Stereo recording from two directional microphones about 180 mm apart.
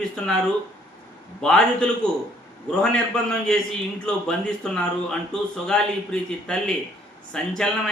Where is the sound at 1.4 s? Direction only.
5° left (ahead or behind).